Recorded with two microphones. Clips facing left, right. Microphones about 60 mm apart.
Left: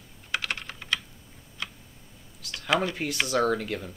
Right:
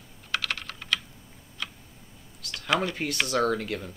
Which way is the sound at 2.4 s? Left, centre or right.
Centre.